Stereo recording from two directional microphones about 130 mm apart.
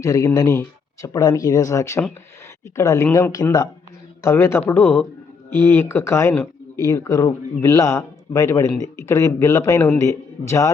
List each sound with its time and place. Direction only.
0.0 s speech: 25° left (ahead or behind)